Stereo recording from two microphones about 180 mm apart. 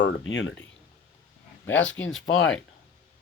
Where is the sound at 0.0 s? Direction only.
90° left.